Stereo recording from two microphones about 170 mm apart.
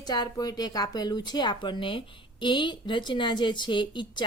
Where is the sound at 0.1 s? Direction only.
25° left (ahead or behind).